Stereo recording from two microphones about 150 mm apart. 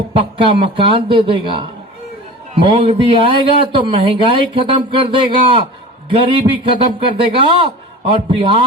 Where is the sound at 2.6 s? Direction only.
35° right (ahead or behind).